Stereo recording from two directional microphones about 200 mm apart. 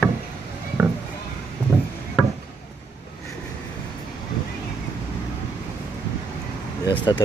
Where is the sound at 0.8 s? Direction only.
10° right (ahead or behind).